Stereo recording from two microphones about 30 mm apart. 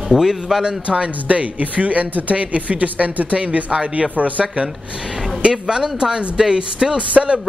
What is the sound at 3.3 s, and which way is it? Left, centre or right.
Speech, right.